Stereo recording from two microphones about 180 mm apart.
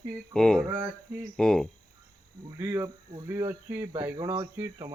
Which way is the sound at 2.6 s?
15° right (ahead or behind).